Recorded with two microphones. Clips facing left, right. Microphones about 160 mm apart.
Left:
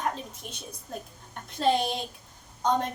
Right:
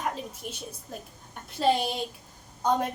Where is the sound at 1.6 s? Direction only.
5° right (ahead or behind).